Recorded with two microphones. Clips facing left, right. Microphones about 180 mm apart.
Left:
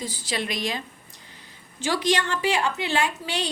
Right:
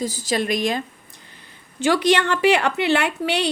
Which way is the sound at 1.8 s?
60° right (ahead or behind).